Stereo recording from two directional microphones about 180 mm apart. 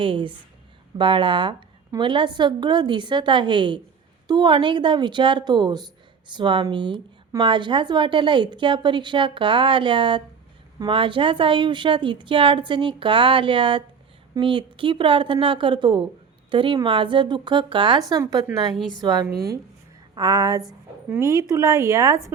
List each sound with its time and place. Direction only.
0.0 s a woman's voice: 30° right (ahead or behind)
18.7 s a woman's voice: centre (ahead or behind)
19.0 s a woman's voice: 20° right (ahead or behind)
19.3 s speech: 55° right (ahead or behind)
20.1 s a woman's voice: 20° right (ahead or behind)